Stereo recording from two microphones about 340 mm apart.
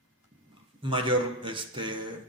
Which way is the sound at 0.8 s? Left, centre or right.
Centre.